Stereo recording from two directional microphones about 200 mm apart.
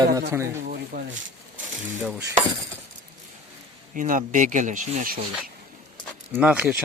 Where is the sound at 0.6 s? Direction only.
50° right (ahead or behind).